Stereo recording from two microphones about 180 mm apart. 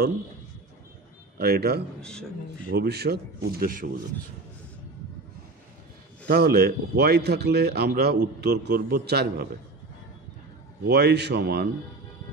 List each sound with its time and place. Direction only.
1.4 s a man's voice: 60° right (ahead or behind)
2.0 s a man's voice: 5° left (ahead or behind)
2.7 s a man's voice: 60° right (ahead or behind)
6.2 s a man's voice: 60° right (ahead or behind)
10.8 s a man's voice: 65° right (ahead or behind)